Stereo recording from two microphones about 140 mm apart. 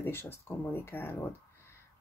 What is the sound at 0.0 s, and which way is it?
Speech, 15° left (ahead or behind).